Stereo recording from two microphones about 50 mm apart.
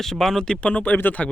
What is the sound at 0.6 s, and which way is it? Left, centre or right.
Speech, left.